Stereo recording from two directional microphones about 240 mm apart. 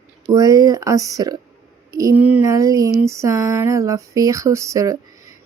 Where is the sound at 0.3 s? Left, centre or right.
Centre.